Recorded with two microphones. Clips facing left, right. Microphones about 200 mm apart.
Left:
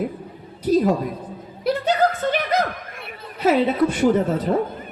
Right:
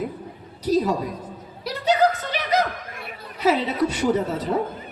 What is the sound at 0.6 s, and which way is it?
Speech, 55° left (ahead or behind).